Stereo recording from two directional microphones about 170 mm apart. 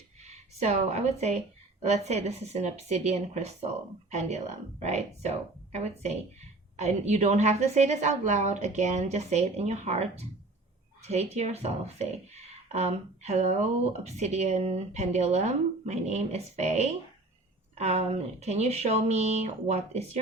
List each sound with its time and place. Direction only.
0.2 s speech: 40° right (ahead or behind)